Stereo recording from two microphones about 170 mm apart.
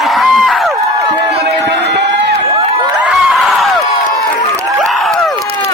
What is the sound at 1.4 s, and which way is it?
Crowd, 80° right.